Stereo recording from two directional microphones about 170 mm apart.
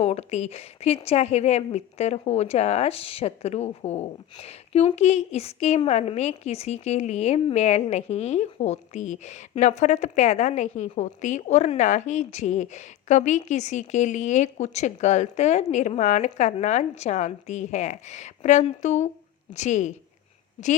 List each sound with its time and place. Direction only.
0.0 s a woman's voice: 40° left (ahead or behind)